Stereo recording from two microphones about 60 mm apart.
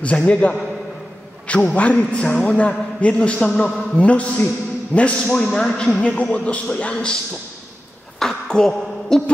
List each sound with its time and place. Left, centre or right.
0.0 s speech: centre
5.3 s a man's voice: centre
5.9 s speech: left
8.2 s speech: centre